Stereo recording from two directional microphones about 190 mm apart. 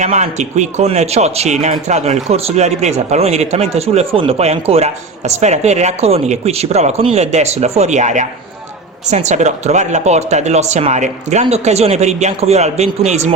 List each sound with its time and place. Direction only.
0.0 s speech: 40° right (ahead or behind)